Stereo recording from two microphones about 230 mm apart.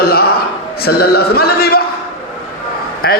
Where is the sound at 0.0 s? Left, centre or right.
Left.